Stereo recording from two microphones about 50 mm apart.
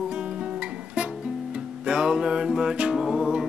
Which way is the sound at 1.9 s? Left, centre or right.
Centre.